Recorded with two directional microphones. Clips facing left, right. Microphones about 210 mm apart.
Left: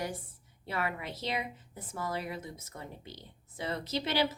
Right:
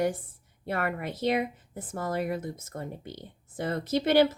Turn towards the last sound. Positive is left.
turn(degrees=-50)  # may be behind; listen again after turning